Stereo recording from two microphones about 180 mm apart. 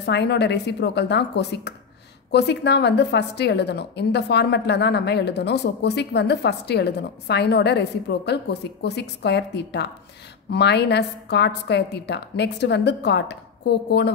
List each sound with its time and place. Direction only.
0.0 s a woman's voice: 70° left (ahead or behind)